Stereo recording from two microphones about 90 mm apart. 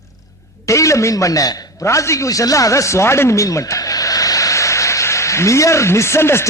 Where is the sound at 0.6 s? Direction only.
35° left (ahead or behind).